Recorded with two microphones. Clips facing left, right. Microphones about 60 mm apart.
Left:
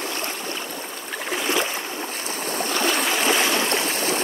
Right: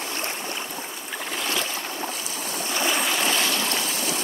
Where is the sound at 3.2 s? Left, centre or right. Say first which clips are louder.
Left 4 dB; centre; by 4.2 s left.